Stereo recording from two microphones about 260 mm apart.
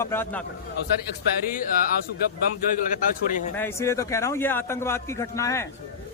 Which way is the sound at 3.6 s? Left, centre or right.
Centre.